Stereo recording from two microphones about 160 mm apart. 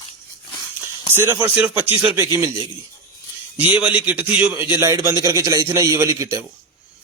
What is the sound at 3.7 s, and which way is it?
A man's voice, 10° right (ahead or behind).